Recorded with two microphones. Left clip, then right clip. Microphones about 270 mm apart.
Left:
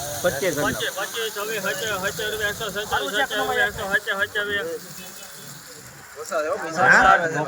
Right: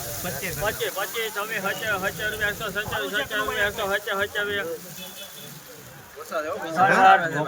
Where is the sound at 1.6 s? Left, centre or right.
Centre.